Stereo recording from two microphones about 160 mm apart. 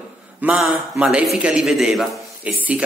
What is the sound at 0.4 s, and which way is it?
A man's voice, 5° right (ahead or behind).